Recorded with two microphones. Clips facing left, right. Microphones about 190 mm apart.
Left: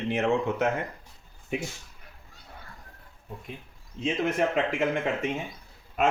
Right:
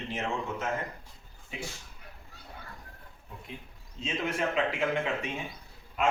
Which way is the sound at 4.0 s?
45° left (ahead or behind).